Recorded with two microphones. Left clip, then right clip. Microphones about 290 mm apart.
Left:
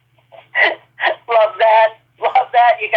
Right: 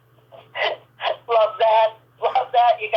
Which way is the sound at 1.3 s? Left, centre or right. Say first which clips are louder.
Left 5 dB; left.